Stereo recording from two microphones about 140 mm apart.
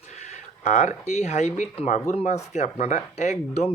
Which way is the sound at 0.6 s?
60° left (ahead or behind).